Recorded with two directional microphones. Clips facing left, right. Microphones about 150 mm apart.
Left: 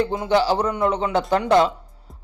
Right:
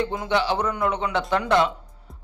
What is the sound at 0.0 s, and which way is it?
A man's voice, 30° left (ahead or behind).